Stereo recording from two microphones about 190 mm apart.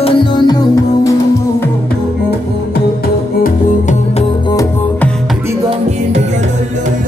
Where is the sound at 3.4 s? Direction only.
40° left (ahead or behind).